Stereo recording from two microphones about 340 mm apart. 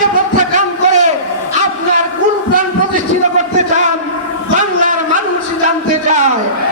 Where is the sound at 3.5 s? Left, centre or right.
Right.